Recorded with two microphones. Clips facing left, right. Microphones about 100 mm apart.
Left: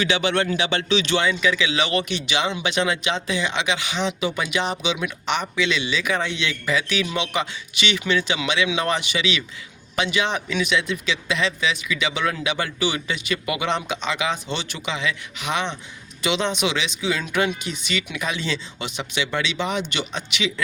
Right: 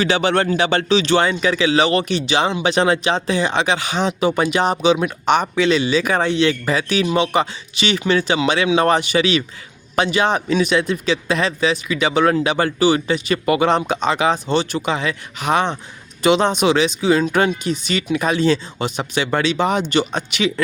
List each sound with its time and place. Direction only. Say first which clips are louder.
0.0 s speech: right 4 dB; 40° right (ahead or behind)